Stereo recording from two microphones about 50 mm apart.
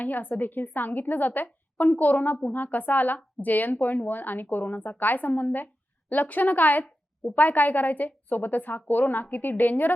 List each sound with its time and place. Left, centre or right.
0.0 s a woman's voice: left